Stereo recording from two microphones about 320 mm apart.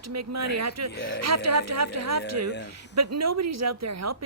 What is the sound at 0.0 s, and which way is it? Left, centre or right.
A woman's voice, right.